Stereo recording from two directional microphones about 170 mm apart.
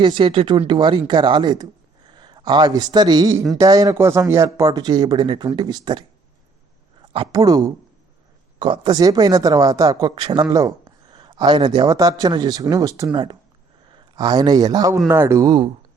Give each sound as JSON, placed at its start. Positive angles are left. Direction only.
{"t": 0.0, "sound": "a man's voice", "side_deg": -30}
{"t": 7.1, "sound": "speech", "side_deg": -25}
{"t": 8.5, "sound": "a man's voice", "side_deg": -30}